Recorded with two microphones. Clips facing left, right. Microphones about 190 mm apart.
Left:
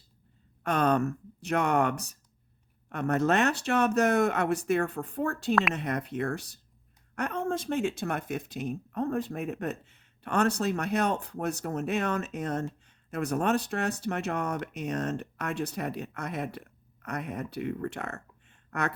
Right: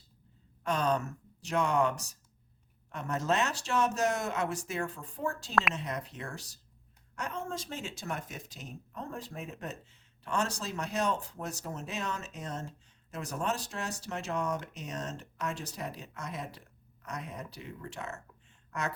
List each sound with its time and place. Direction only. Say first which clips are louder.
0.6 s speech: left 5 dB; 60° left (ahead or behind)